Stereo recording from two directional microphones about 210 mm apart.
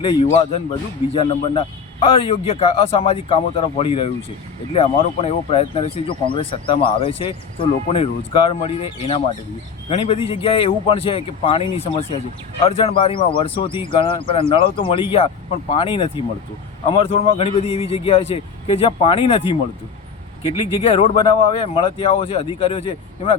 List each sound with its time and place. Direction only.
0.0 s speech: 25° left (ahead or behind)